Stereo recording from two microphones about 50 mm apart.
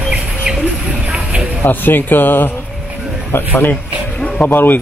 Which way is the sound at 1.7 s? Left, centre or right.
Left.